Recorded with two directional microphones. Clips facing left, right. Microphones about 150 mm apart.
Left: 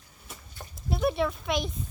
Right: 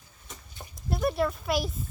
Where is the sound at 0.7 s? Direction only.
Centre (ahead or behind).